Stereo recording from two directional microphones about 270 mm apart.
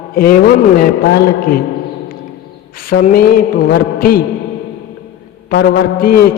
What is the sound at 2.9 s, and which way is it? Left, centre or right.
A man's voice, left.